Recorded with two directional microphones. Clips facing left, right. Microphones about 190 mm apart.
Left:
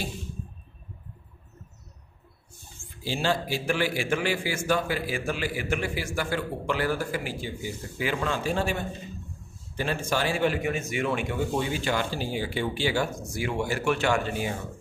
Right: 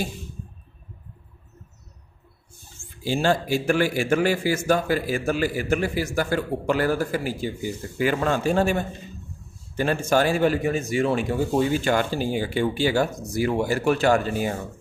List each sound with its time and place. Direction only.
3.0 s a man's voice: 45° right (ahead or behind)